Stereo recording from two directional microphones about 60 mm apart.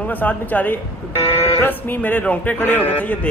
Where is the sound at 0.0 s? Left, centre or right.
Left.